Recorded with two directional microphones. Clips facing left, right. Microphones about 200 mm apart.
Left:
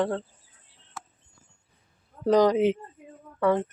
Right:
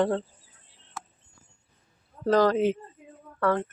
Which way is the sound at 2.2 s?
15° left (ahead or behind).